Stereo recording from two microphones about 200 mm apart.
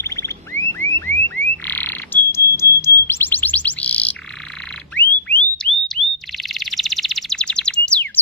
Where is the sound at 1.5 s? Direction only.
10° left (ahead or behind).